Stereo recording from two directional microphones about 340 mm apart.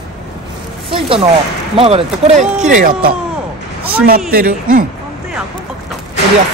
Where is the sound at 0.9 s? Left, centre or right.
Centre.